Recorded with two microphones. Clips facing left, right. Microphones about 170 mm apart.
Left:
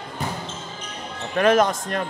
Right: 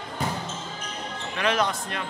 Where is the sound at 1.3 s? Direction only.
45° left (ahead or behind).